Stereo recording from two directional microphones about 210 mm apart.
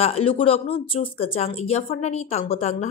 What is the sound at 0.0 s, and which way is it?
Speech, 25° left (ahead or behind).